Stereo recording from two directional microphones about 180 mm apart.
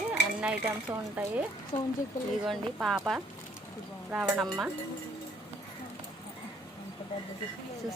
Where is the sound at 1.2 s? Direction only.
10° right (ahead or behind).